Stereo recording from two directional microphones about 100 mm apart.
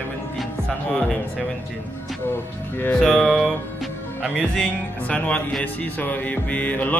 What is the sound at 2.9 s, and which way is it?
Speech, 10° left (ahead or behind).